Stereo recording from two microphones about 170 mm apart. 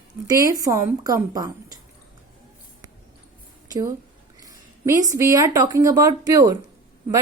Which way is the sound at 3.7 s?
20° right (ahead or behind).